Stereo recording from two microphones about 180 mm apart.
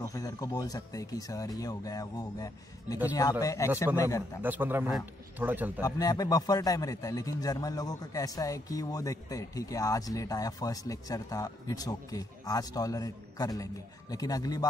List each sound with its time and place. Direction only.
0.0 s speech: 20° left (ahead or behind)
4.4 s a man's voice: 10° right (ahead or behind)
5.8 s speech: 20° left (ahead or behind)